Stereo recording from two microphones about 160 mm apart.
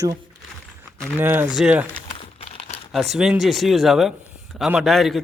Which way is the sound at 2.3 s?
40° left (ahead or behind).